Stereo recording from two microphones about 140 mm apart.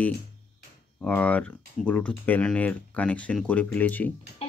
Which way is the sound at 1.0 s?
10° left (ahead or behind).